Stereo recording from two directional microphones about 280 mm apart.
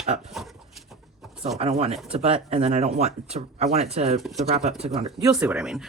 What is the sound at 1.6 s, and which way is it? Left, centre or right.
Speech, right.